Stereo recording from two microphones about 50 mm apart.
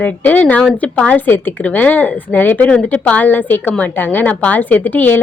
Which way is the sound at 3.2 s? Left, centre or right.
Left.